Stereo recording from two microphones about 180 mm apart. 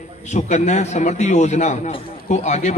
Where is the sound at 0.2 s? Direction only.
40° left (ahead or behind).